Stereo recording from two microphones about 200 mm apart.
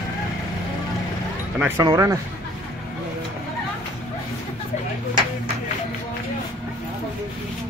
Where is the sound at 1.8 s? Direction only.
15° right (ahead or behind).